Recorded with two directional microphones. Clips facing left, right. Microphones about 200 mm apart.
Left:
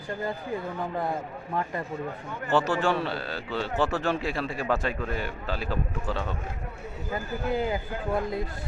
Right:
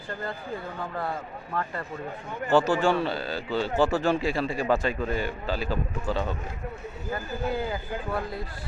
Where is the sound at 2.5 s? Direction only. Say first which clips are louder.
Right 3 dB; centre (ahead or behind).